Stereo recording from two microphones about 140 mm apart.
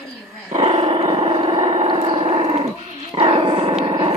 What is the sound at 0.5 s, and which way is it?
Dog, 40° right (ahead or behind).